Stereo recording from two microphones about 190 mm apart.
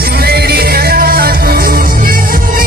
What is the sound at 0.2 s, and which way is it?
Music, 55° right (ahead or behind).